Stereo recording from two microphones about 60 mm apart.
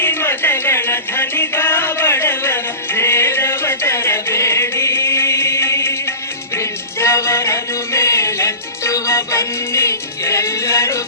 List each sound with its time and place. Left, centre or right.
0.0 s music: left